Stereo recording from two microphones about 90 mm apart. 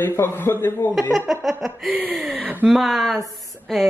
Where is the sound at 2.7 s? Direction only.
Centre (ahead or behind).